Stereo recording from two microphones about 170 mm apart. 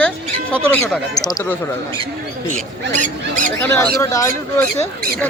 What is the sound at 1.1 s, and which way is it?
Speech, 20° left (ahead or behind).